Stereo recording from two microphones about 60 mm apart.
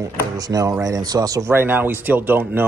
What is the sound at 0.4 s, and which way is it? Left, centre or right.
Speech, right.